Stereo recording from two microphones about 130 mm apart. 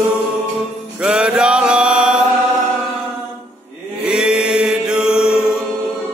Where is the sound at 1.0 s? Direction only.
5° right (ahead or behind).